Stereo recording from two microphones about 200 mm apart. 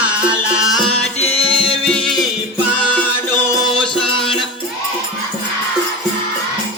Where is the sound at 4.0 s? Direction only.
25° left (ahead or behind).